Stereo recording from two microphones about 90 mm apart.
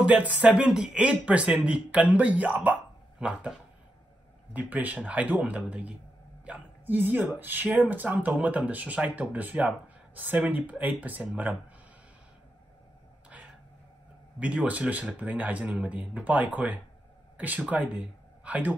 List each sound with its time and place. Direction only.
0.0 s speech: 15° right (ahead or behind)
4.6 s speech: 15° right (ahead or behind)
14.4 s speech: 15° right (ahead or behind)